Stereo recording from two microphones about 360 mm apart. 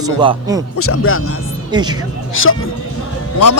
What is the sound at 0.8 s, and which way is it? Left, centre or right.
Speech, left.